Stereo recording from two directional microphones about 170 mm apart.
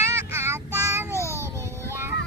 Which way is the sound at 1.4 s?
15° right (ahead or behind).